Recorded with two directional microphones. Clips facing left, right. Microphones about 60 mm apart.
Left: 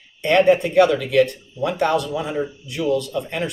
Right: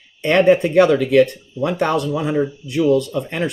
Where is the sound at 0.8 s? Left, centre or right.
Right.